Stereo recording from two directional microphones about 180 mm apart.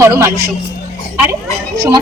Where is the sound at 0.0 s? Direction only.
15° right (ahead or behind).